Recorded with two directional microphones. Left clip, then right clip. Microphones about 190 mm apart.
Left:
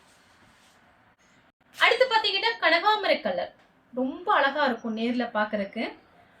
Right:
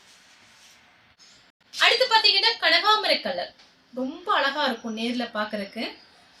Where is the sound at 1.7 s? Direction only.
5° left (ahead or behind).